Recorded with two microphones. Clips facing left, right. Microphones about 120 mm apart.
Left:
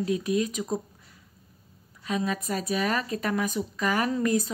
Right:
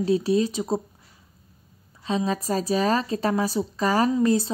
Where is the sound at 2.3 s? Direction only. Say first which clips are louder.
Right 5 dB; 30° right (ahead or behind).